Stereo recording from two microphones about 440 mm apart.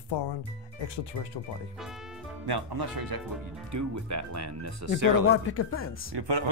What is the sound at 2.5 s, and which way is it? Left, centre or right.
Speech, right.